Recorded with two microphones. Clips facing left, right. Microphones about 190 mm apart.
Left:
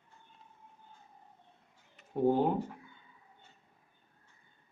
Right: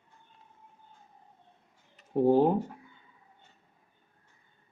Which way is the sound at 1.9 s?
35° right (ahead or behind).